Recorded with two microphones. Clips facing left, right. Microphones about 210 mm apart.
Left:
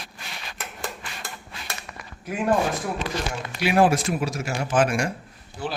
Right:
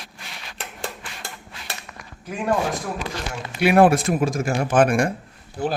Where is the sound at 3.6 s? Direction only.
55° right (ahead or behind).